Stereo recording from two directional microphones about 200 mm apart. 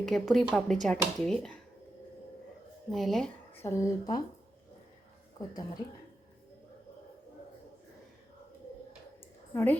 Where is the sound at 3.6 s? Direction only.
15° left (ahead or behind).